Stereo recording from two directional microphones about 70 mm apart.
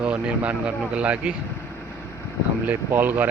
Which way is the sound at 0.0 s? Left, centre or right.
Centre.